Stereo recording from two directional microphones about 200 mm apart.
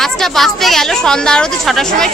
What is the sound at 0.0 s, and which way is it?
Speech, centre (ahead or behind).